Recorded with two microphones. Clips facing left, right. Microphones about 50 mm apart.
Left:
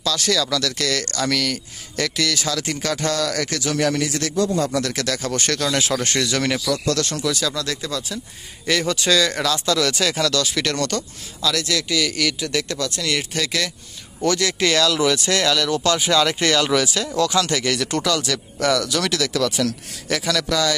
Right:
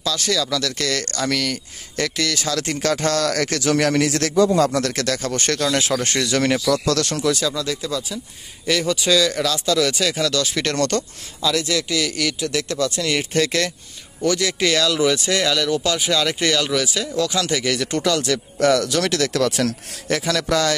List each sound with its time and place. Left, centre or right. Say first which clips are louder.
0.0 s speech: left 1 dB; centre
3.1 s speech: right 2 dB; right
3.7 s a man's voice: right 2 dB; right
4.6 s speech: right 2 dB; right
5.3 s speech: right 1 dB; right
6.1 s speech: right 2 dB; centre
10.2 s speech: even; centre
10.8 s speech: right 3 dB; right
11.4 s speech: right 1 dB; centre
12.7 s speech: right 3 dB; centre
13.3 s speech: right 4 dB; right
14.2 s speech: even; centre; by 20.7 s right